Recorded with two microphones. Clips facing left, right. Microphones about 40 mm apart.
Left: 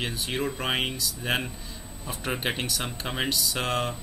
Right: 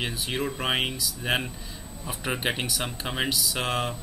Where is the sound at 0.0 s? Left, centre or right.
Centre.